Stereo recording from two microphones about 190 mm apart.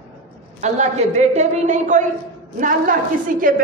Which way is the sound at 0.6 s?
35° right (ahead or behind).